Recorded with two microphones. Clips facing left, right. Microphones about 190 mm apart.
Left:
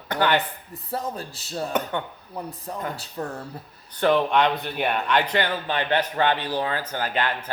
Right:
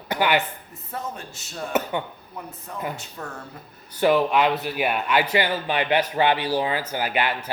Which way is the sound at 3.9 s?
5° right (ahead or behind).